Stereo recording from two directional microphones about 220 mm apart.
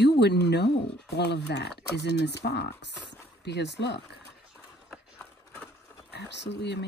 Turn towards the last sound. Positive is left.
turn(degrees=50)  # may be behind; listen again after turning